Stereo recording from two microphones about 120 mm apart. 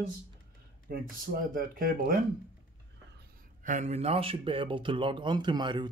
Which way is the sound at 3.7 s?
75° right (ahead or behind).